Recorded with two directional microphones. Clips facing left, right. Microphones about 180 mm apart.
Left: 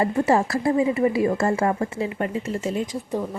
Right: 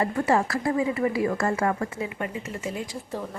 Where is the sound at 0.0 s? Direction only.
25° left (ahead or behind).